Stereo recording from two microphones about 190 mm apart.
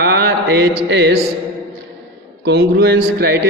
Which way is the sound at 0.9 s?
60° right (ahead or behind).